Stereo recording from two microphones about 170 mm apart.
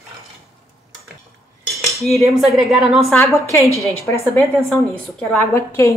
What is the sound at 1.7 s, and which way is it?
Cutlery, centre (ahead or behind).